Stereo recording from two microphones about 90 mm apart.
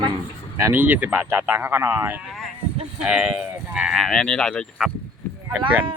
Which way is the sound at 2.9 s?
15° right (ahead or behind).